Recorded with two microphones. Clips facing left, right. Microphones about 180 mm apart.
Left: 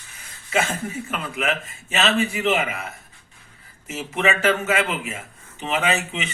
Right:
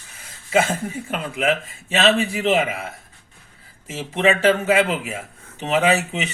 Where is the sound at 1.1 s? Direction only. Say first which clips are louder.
Right 5 dB; 35° right (ahead or behind).